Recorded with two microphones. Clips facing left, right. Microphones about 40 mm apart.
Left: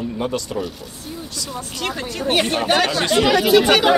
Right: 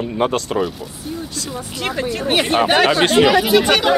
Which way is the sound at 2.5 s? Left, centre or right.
Centre.